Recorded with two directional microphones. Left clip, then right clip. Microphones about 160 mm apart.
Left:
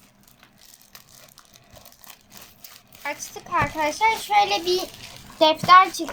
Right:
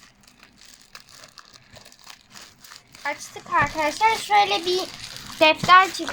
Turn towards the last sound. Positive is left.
turn(degrees=-5)  # may be behind; listen again after turning